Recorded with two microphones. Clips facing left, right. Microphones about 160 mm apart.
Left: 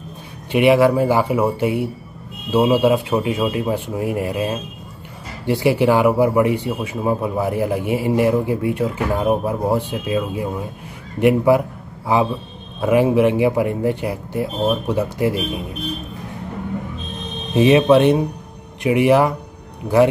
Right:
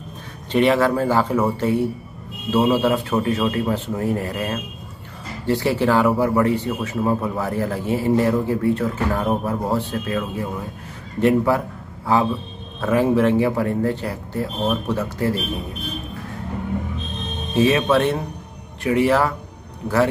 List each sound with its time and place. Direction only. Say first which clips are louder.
0.5 s speech: left 3 dB; 10° left (ahead or behind)
12.8 s speech: left 3 dB; 15° left (ahead or behind)
17.6 s speech: left 5 dB; 20° left (ahead or behind)